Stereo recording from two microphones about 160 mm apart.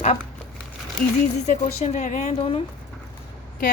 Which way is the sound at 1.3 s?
45° left (ahead or behind).